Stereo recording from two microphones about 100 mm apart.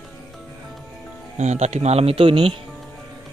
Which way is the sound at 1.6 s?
90° right.